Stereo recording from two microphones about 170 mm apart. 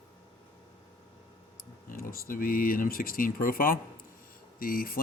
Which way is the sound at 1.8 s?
55° left (ahead or behind).